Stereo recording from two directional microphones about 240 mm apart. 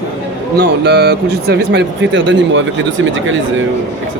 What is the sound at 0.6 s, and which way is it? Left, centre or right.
Speech, right.